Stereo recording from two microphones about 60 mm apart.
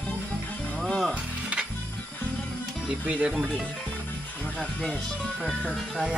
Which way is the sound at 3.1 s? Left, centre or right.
Right.